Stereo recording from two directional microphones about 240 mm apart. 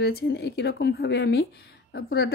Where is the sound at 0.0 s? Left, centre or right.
Left.